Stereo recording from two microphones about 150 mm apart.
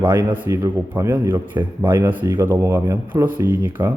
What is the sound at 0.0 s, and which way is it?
A man's voice, 15° right (ahead or behind).